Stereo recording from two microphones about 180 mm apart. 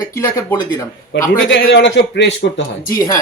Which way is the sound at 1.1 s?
85° left.